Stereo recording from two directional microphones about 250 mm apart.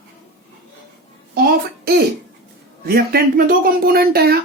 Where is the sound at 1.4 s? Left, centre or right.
Right.